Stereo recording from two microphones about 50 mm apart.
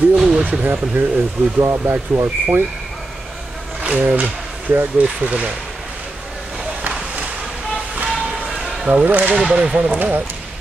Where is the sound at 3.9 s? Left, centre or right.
Right.